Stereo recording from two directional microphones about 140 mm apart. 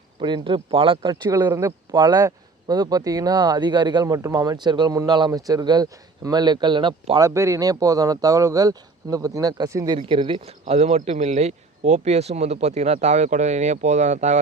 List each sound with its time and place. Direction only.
0.2 s speech: 35° right (ahead or behind)
7.3 s speech: 20° right (ahead or behind)
10.1 s speech: 35° right (ahead or behind); by 14.3 s 55° right (ahead or behind)